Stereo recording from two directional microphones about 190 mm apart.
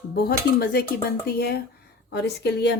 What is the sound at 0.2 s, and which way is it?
Speech, 55° left (ahead or behind).